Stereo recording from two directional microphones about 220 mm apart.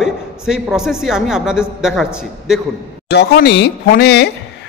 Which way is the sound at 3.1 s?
50° left (ahead or behind).